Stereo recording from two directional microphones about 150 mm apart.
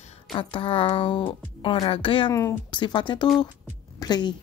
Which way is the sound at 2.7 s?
30° left (ahead or behind).